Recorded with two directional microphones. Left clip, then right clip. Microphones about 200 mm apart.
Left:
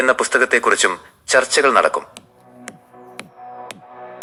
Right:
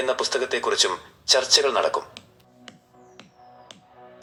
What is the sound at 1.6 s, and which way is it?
Speech, 30° left (ahead or behind).